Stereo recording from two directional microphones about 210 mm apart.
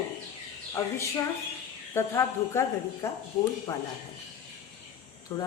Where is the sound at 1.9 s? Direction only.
15° left (ahead or behind).